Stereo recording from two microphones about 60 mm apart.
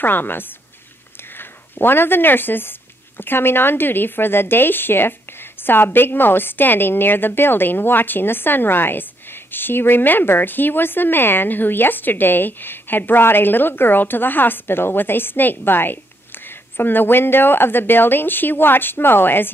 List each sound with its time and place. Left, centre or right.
0.0 s speech: left